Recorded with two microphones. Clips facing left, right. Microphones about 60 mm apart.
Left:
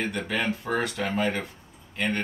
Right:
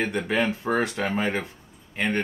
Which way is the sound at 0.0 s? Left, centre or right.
Right.